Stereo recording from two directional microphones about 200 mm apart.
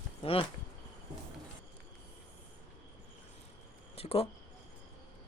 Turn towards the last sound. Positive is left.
turn(degrees=30)  # may be behind; listen again after turning